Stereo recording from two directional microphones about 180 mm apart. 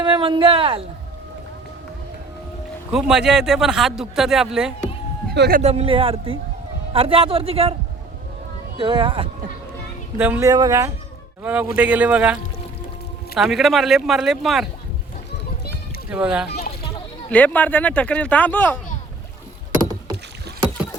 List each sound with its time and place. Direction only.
0.0 s speech: 25° right (ahead or behind)
2.9 s speech: 5° right (ahead or behind)
5.3 s speech: 65° right (ahead or behind)
5.5 s a man's voice: 35° right (ahead or behind)
8.8 s speech: 25° right (ahead or behind)
10.2 s speech: 10° right (ahead or behind)
16.0 s speech: 5° right (ahead or behind)
17.3 s speech: 10° left (ahead or behind)